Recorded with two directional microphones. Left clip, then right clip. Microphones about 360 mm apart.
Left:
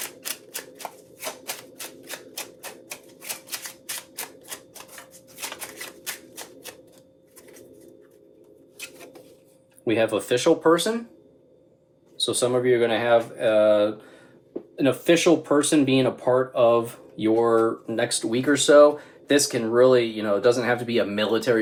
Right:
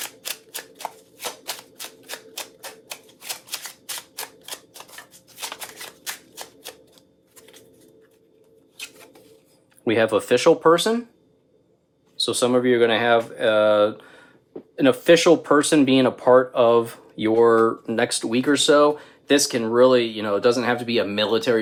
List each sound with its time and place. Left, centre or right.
3.2 s shuffling cards: centre
5.5 s shuffling cards: centre
8.8 s a sound: centre
9.8 s speech: centre
12.2 s speech: centre